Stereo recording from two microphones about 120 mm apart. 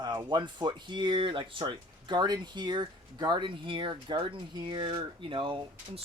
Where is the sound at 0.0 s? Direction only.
40° right (ahead or behind).